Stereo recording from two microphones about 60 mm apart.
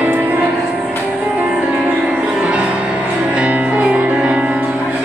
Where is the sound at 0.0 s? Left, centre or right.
Right.